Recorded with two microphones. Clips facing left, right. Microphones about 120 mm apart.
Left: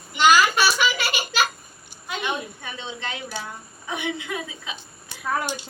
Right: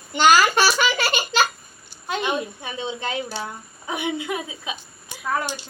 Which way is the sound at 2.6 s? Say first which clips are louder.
Right 5 dB; 20° right (ahead or behind).